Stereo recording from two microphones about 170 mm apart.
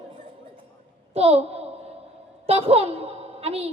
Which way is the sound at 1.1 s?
35° right (ahead or behind).